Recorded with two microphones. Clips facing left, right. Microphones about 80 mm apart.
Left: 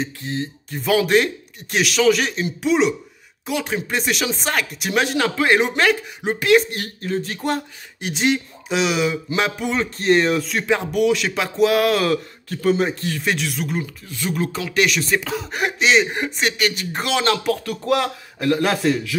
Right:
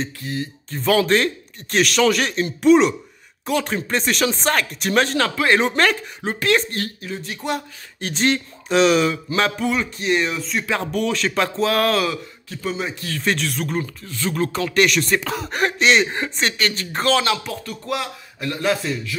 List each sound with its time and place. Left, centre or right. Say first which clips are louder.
0.2 s speech: left 1 dB; left
0.7 s speech: even; centre
7.0 s a man's voice: left 5 dB; left
8.0 s speech: even; centre
9.8 s a man's voice: left 3 dB; left
10.7 s speech: left 5 dB; centre
12.1 s a man's voice: left 6 dB; left
13.2 s speech: right 3 dB; centre
17.2 s speech: left 2 dB; left
17.5 s speech: left 7 dB; left